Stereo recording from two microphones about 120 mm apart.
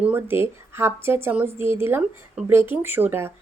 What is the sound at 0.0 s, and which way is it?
Speech, 15° right (ahead or behind).